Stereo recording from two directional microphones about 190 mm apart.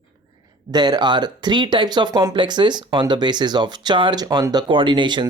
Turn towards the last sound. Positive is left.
turn(degrees=-25)  # may be behind; listen again after turning